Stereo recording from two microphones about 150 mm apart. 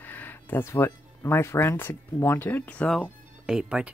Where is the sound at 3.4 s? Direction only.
5° right (ahead or behind).